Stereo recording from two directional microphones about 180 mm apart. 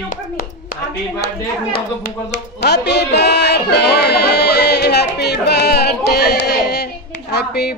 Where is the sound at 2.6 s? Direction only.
70° left (ahead or behind).